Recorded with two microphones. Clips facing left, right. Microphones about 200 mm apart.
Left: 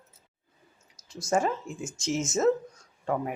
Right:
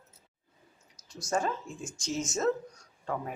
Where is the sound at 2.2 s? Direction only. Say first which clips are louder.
Left 6 dB; 25° left (ahead or behind).